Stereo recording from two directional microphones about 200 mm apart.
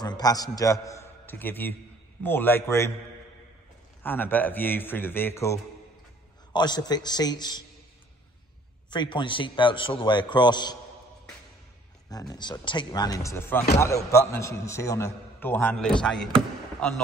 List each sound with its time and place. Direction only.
0.0 s a man's voice: 20° left (ahead or behind)
4.0 s a man's voice: 10° left (ahead or behind)
8.9 s a man's voice: 25° left (ahead or behind)
12.1 s a man's voice: 20° left (ahead or behind); by 17.0 s 5° left (ahead or behind)